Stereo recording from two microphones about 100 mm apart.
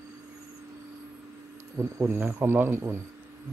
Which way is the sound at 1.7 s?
25° right (ahead or behind).